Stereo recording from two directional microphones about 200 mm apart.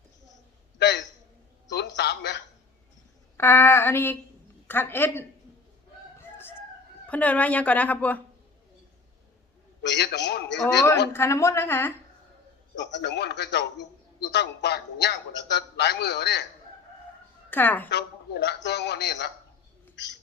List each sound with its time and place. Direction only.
0.8 s a sound: 55° left (ahead or behind)
3.3 s a woman's voice: 10° left (ahead or behind)
7.1 s a woman's voice: 5° left (ahead or behind)
9.8 s a man's voice: 60° left (ahead or behind)
11.1 s a woman's voice: 15° left (ahead or behind)
12.7 s a man's voice: 60° left (ahead or behind)
17.5 s a woman's voice: 10° left (ahead or behind)
17.8 s a man's voice: 60° left (ahead or behind)